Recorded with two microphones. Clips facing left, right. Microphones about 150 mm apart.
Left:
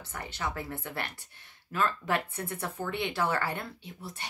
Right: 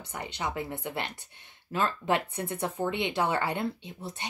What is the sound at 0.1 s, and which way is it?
Speech, 20° right (ahead or behind).